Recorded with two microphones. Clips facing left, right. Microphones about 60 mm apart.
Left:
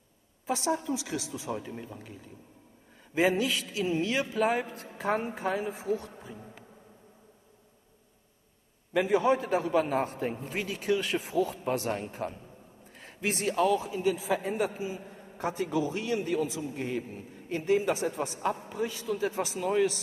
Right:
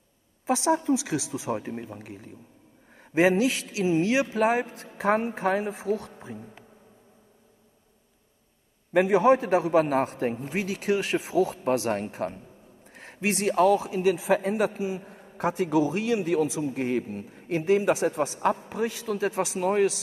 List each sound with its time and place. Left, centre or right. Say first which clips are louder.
0.7 s speech: right 7 dB; right
3.0 s a man's voice: right 5 dB; right
8.9 s a man's voice: right 5 dB; right
15.0 s a sound: right 2 dB; right
15.3 s a man's voice: right 6 dB; right
16.6 s a man's voice: right 6 dB; right
18.7 s a man's voice: right 3 dB; right